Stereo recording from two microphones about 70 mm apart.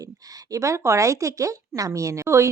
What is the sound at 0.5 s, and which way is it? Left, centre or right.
A woman's voice, right.